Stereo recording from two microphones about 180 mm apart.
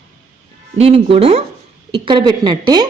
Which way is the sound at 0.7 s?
35° right (ahead or behind).